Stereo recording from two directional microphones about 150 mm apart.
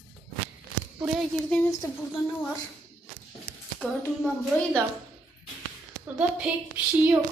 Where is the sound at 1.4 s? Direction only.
5° left (ahead or behind).